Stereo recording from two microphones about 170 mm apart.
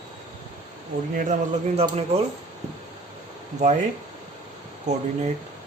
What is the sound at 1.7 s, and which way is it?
Speech, 35° right (ahead or behind).